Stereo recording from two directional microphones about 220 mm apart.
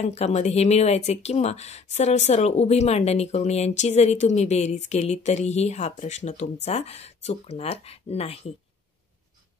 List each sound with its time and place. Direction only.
0.0 s speech: 30° left (ahead or behind)